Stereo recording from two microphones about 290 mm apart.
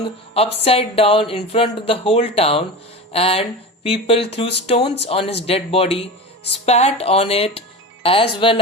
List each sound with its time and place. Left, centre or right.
0.3 s speech: centre